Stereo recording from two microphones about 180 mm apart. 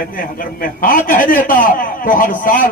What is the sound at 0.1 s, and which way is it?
A man's voice, 50° left (ahead or behind).